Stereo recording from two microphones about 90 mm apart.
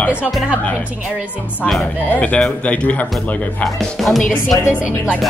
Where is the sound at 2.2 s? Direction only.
10° left (ahead or behind).